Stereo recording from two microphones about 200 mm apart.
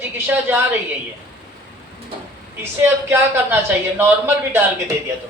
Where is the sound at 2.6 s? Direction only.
10° right (ahead or behind).